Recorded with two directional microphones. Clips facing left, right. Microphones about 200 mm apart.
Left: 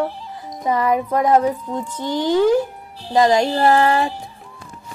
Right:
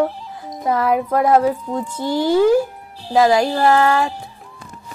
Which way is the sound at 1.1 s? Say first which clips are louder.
Right 2 dB; 10° right (ahead or behind).